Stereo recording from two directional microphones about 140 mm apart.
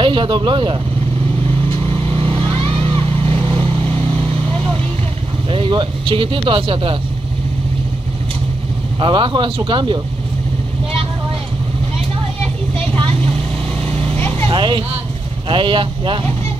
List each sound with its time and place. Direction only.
0.0 s speech: 35° right (ahead or behind)
1.7 s vehicle: 40° right (ahead or behind)
5.5 s speech: 40° right (ahead or behind)
9.0 s speech: 35° right (ahead or behind)
12.9 s vehicle: 40° right (ahead or behind)
14.1 s vehicle: 10° left (ahead or behind)
14.5 s speech: 35° right (ahead or behind)